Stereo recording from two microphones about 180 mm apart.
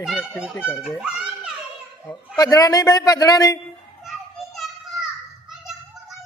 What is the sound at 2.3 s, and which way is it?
A man's voice, 20° left (ahead or behind).